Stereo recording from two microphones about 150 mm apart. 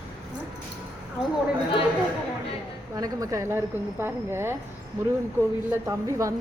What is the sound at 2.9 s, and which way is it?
A woman's voice, 25° right (ahead or behind).